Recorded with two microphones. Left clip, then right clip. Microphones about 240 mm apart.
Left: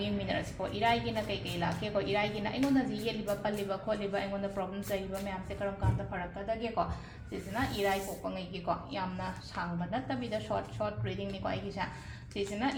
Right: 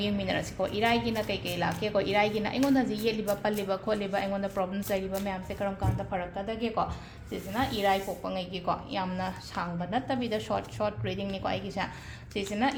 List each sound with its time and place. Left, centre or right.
0.0 s a woman's voice: right
7.5 s a woman's voice: right